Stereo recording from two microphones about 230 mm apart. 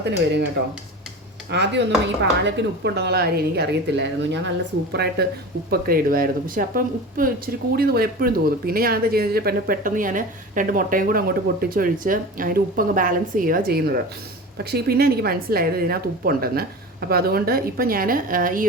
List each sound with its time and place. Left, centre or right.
0.0 s speech: right
1.5 s speech: right